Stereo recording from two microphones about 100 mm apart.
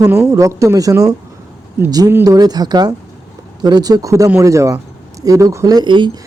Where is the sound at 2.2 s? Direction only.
40° right (ahead or behind).